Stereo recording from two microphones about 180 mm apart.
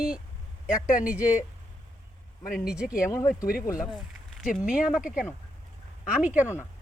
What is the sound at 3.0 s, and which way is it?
Speech, 15° left (ahead or behind).